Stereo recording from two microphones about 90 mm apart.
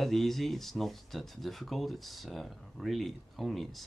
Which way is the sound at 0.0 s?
Centre (ahead or behind).